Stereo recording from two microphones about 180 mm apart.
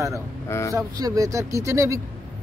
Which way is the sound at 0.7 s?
20° right (ahead or behind).